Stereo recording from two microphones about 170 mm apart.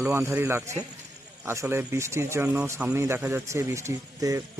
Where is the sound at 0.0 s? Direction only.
15° right (ahead or behind).